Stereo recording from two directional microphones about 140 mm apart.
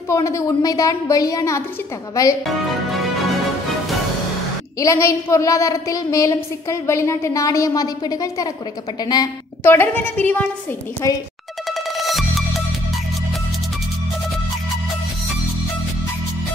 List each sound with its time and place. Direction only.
0.1 s a woman's voice: 20° left (ahead or behind)
4.7 s a woman's voice: 20° left (ahead or behind)
9.6 s a woman's voice: 15° left (ahead or behind)
11.0 s a woman's voice: 20° left (ahead or behind)
11.7 s music: centre (ahead or behind)